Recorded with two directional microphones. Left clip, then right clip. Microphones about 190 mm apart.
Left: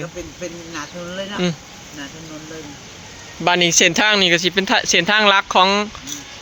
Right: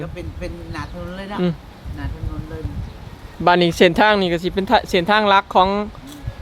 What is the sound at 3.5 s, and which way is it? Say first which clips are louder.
Speech: right 1 dB; 25° right (ahead or behind).